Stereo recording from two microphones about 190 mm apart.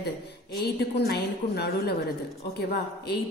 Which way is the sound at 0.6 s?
60° left (ahead or behind).